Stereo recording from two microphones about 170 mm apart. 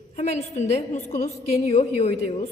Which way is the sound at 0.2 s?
40° left (ahead or behind).